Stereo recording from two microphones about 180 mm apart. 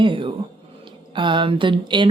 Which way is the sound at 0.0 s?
30° right (ahead or behind).